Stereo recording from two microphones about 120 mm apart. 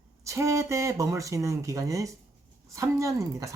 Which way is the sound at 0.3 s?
25° right (ahead or behind).